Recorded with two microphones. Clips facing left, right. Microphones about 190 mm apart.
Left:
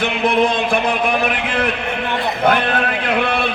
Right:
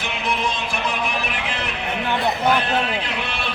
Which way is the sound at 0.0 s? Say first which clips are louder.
Left 9 dB; 55° left (ahead or behind).